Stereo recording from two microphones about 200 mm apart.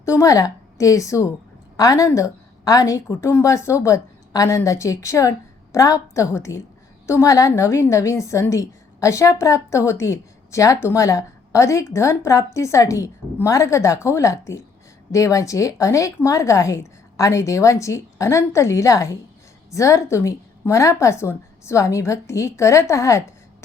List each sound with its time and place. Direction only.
0.0 s a woman's voice: 15° left (ahead or behind)